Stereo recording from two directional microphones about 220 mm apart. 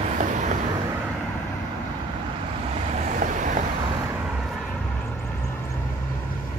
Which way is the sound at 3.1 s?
35° right (ahead or behind).